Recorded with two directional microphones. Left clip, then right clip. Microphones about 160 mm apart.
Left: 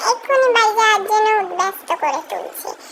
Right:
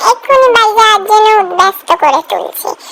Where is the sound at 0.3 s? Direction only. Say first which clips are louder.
Right 7 dB; 35° right (ahead or behind).